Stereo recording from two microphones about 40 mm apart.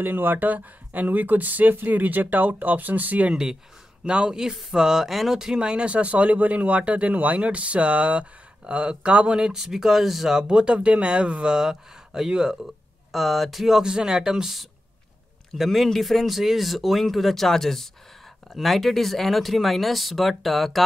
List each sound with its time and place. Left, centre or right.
0.0 s speech: right
4.0 s speech: right
9.5 s speech: centre
10.4 s speech: right
13.1 s speech: centre